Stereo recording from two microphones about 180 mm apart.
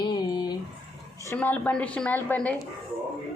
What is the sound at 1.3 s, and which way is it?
A woman's voice, 10° left (ahead or behind).